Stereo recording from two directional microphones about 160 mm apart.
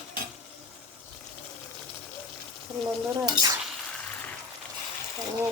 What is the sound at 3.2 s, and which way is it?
Stir, 25° right (ahead or behind).